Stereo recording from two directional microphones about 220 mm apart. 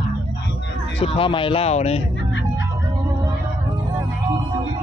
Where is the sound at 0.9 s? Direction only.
25° left (ahead or behind).